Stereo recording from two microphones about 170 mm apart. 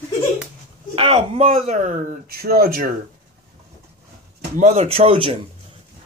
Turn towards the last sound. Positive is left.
turn(degrees=-35)  # may be behind; listen again after turning